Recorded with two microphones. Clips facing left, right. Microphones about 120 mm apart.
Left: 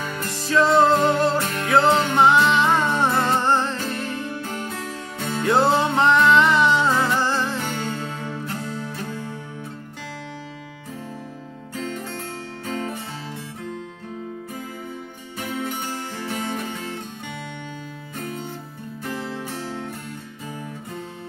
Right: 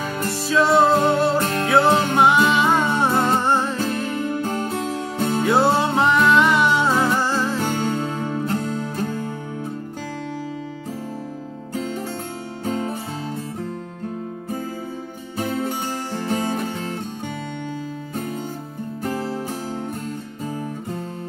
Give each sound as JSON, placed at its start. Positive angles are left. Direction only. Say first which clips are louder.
{"t": 0.5, "sound": "music", "louder": "even", "side_deg": -5}
{"t": 1.4, "sound": "music", "louder": "right 4 dB", "side_deg": -45}
{"t": 1.7, "sound": "music", "louder": "even", "side_deg": -5}
{"t": 4.4, "sound": "music", "louder": "right 6 dB", "side_deg": -35}
{"t": 5.4, "sound": "music", "louder": "even", "side_deg": -5}
{"t": 7.5, "sound": "music", "louder": "right 5 dB", "side_deg": -45}
{"t": 15.3, "sound": "music", "louder": "right 4 dB", "side_deg": -40}
{"t": 19.0, "sound": "music", "louder": "right 4 dB", "side_deg": -40}